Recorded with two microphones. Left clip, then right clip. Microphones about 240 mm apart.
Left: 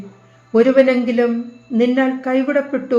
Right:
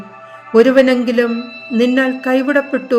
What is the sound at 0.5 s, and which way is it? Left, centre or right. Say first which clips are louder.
Speech: right 3 dB; right.